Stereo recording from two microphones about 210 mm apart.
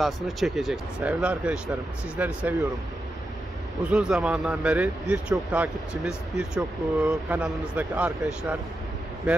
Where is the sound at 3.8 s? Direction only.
5° right (ahead or behind).